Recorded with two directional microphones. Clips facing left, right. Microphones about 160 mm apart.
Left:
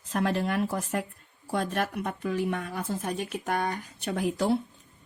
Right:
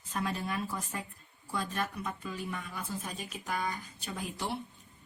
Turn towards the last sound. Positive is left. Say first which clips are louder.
# left 11 dB
turn(degrees=90)